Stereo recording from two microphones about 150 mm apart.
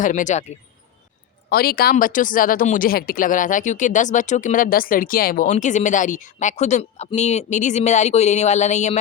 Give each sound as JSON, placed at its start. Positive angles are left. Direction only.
{"t": 0.0, "sound": "speech", "side_deg": 55}
{"t": 1.5, "sound": "speech", "side_deg": 90}